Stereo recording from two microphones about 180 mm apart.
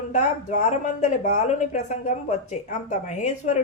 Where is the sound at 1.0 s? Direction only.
45° left (ahead or behind).